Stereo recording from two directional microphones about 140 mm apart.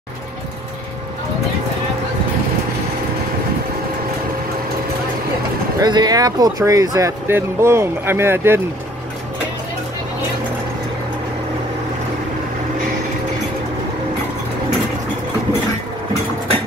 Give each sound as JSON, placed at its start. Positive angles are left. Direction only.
{"t": 5.8, "sound": "speech", "side_deg": -30}